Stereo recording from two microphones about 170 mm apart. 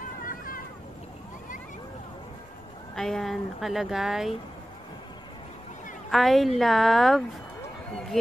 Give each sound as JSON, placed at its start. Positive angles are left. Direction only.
{"t": 0.2, "sound": "a sound", "side_deg": 55}
{"t": 3.0, "sound": "speech", "side_deg": 0}
{"t": 6.0, "sound": "speech", "side_deg": 0}